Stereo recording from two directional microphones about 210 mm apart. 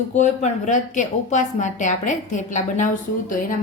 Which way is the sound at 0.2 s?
35° left (ahead or behind).